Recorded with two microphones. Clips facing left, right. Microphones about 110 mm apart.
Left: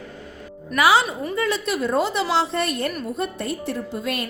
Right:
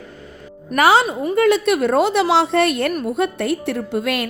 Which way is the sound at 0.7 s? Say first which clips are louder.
Right 3 dB; 55° right (ahead or behind).